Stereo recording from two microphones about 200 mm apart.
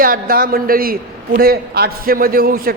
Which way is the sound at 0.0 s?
45° right (ahead or behind).